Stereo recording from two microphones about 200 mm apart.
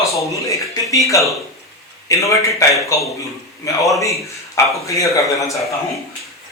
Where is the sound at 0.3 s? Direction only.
15° left (ahead or behind).